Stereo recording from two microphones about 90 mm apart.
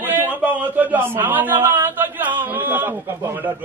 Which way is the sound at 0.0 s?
25° right (ahead or behind).